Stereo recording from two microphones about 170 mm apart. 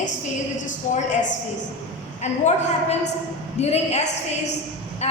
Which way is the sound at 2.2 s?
40° left (ahead or behind).